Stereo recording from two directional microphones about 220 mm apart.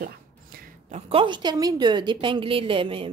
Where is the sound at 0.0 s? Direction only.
40° right (ahead or behind).